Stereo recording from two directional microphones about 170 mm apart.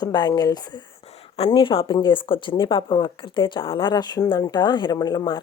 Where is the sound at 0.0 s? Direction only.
25° left (ahead or behind).